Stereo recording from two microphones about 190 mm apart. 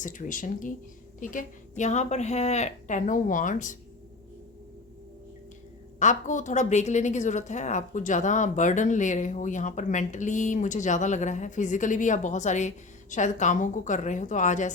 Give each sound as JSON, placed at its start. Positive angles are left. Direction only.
{"t": 0.0, "sound": "a woman's voice", "side_deg": 40}
{"t": 6.0, "sound": "a woman's voice", "side_deg": 40}